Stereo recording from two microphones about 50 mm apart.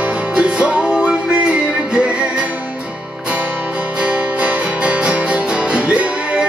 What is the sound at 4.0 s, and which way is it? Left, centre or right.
Music, right.